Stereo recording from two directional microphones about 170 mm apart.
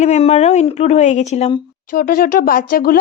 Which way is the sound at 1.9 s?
60° left (ahead or behind).